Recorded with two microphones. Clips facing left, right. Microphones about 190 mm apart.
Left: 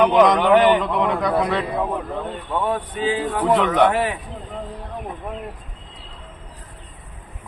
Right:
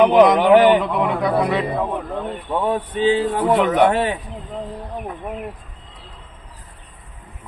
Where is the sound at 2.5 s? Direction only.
20° right (ahead or behind).